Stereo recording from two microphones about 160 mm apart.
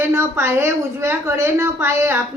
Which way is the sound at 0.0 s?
15° right (ahead or behind).